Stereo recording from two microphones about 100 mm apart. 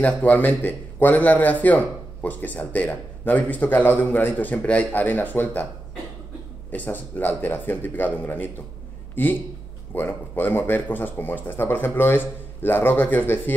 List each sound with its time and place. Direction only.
0.0 s a man's voice: 15° left (ahead or behind)
6.7 s a man's voice: 20° left (ahead or behind)